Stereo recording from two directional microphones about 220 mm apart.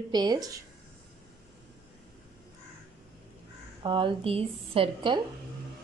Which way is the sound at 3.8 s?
25° right (ahead or behind).